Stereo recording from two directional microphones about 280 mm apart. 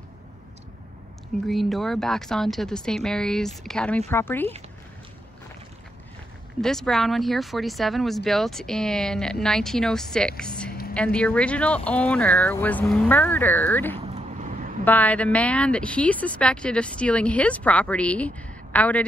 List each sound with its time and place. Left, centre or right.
1.5 s a woman's voice: centre
6.6 s a woman's voice: centre
13.9 s vehicle: right
14.9 s a woman's voice: centre